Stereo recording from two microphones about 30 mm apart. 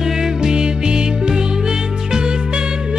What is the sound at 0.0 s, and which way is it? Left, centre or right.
Music, centre.